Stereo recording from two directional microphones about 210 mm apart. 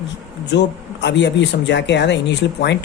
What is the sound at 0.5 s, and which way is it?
Speech, 55° left (ahead or behind).